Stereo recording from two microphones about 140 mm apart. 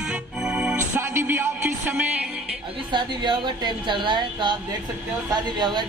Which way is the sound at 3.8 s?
35° right (ahead or behind).